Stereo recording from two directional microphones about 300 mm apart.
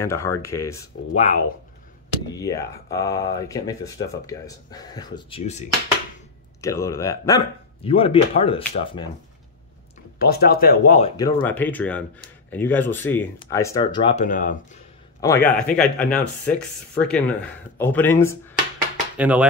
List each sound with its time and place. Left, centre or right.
0.0 s speech: centre
1.1 s speech: left
2.3 s speech: centre
6.6 s speech: centre
10.1 s speech: left
15.1 s a man's voice: centre
19.1 s speech: centre